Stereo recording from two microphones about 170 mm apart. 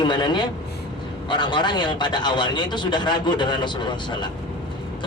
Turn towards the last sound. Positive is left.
turn(degrees=25)  # may be behind; listen again after turning